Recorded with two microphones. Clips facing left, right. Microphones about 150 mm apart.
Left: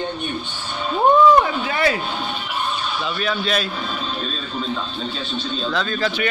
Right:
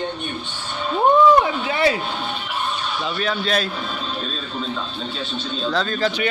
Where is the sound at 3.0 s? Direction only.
35° right (ahead or behind).